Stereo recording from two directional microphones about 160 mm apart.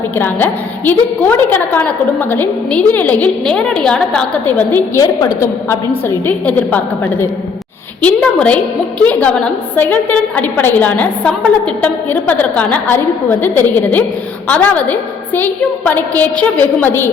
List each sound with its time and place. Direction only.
0.2 s a woman's voice: 10° left (ahead or behind)